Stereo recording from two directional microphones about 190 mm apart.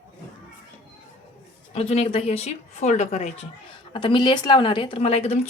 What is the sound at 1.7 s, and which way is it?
Speech, 35° left (ahead or behind).